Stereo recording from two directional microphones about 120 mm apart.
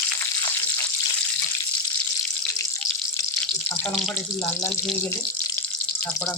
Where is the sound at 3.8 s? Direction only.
5° left (ahead or behind).